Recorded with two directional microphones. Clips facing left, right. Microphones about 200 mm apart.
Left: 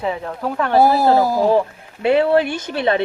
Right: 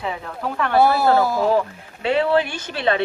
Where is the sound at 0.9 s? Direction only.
40° left (ahead or behind).